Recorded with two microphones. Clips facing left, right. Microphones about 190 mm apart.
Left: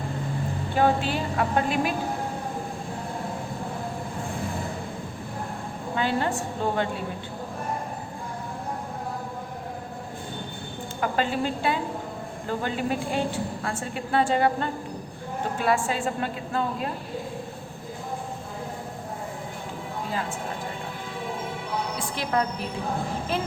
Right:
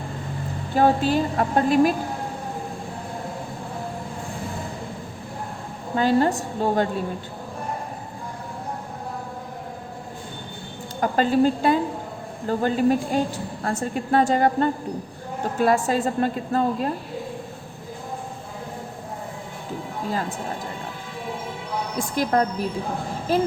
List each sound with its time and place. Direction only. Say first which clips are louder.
0.8 s a woman's voice: right 4 dB; 40° right (ahead or behind)
6.0 s a woman's voice: right 7 dB; 40° right (ahead or behind)
11.0 s a woman's voice: right 7 dB; 40° right (ahead or behind)
21.9 s a woman's voice: right 7 dB; 45° right (ahead or behind)